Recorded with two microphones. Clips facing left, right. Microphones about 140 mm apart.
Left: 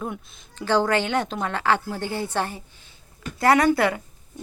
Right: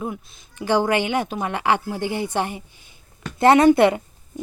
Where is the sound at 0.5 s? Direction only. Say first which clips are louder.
Right 2 dB; 15° right (ahead or behind).